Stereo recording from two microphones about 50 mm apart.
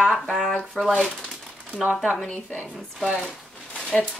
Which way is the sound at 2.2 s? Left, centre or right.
Left.